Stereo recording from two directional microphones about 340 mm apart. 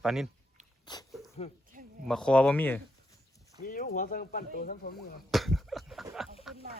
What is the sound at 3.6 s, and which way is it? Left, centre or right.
Speech, left.